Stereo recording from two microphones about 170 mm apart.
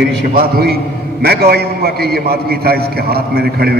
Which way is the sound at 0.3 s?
65° right (ahead or behind).